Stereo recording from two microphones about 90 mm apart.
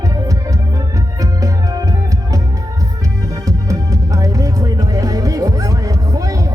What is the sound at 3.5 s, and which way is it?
Music, 35° right (ahead or behind).